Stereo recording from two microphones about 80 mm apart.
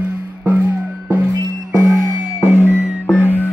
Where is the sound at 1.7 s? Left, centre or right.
Right.